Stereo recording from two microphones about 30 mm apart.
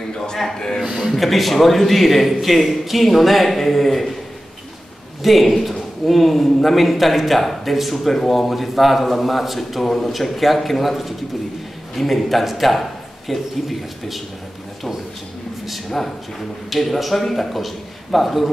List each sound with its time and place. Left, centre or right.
0.1 s a man's voice: left
0.8 s speech: centre
1.1 s a man's voice: centre
5.2 s a man's voice: centre
16.7 s a man's voice: centre